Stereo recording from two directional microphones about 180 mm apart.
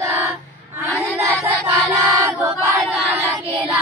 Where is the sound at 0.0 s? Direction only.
15° right (ahead or behind).